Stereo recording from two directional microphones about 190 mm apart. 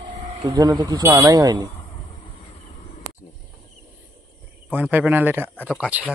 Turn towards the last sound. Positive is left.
turn(degrees=-5)  # may be behind; listen again after turning